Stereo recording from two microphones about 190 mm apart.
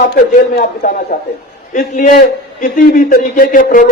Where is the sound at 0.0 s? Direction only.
55° left (ahead or behind).